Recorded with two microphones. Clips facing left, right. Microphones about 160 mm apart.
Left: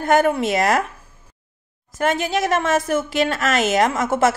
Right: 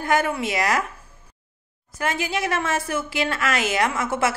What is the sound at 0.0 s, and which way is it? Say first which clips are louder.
Speech: left 5 dB; 50° left (ahead or behind).